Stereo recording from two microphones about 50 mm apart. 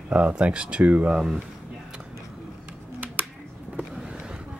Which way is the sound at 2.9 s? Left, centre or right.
Right.